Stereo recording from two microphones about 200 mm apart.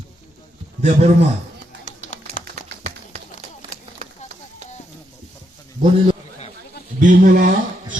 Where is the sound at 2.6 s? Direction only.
35° right (ahead or behind).